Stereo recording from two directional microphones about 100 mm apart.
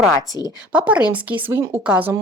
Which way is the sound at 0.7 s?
10° right (ahead or behind).